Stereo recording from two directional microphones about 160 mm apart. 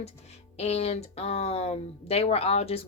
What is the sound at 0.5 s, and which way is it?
Speech, 40° left (ahead or behind).